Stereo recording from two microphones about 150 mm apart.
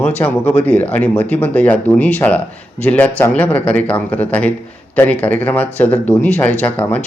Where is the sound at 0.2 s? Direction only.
15° left (ahead or behind).